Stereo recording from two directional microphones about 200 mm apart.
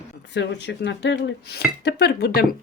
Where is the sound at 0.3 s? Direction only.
60° left (ahead or behind).